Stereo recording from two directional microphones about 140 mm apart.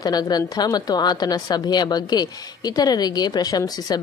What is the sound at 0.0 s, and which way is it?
A woman's voice, 30° left (ahead or behind).